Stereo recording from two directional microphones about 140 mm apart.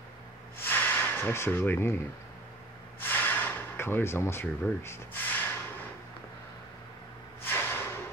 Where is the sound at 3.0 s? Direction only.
15° left (ahead or behind).